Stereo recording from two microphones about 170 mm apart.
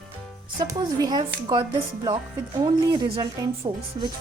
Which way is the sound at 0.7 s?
25° right (ahead or behind).